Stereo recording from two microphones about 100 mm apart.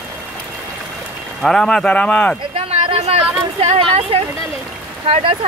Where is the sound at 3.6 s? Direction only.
70° right (ahead or behind).